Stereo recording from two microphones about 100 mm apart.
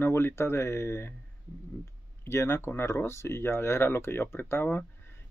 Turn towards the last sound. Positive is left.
turn(degrees=20)  # may be behind; listen again after turning